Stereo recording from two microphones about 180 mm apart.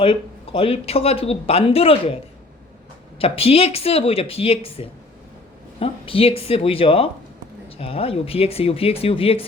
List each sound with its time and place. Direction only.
0.0 s speech: 30° left (ahead or behind)
3.2 s speech: 30° left (ahead or behind)